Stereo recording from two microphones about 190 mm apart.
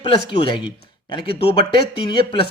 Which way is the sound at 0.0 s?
25° left (ahead or behind).